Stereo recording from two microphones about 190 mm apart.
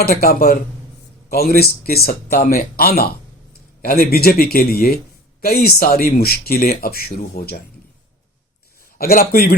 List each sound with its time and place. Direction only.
0.0 s speech: 55° left (ahead or behind)
9.0 s speech: 50° left (ahead or behind)